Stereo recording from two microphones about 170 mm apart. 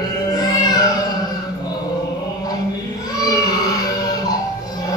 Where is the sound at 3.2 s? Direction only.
20° left (ahead or behind).